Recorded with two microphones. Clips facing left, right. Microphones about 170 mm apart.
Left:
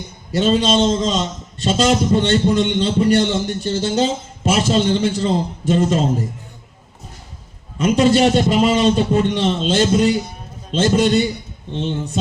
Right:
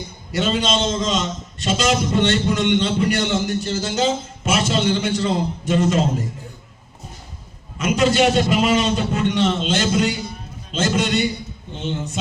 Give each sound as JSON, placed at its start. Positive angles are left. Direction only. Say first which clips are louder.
{"t": 0.3, "sound": "a man's voice", "louder": "left 5 dB", "side_deg": 30}
{"t": 7.8, "sound": "a man's voice", "louder": "left 3 dB", "side_deg": 30}